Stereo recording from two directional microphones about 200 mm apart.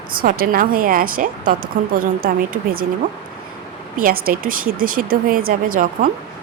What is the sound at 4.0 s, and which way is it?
Speech, 45° right (ahead or behind).